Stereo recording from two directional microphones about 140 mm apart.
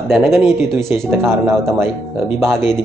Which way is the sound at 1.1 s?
15° right (ahead or behind).